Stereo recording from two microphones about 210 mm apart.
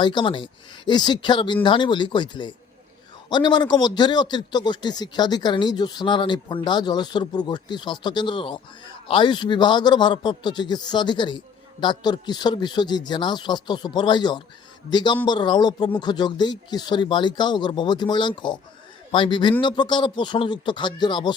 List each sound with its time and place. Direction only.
0.0 s a man's voice: 20° left (ahead or behind)